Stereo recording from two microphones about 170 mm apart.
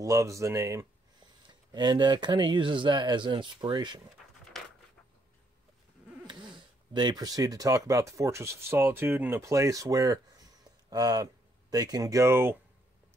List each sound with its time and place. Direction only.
0.0 s speech: 20° right (ahead or behind)
6.9 s speech: 25° right (ahead or behind)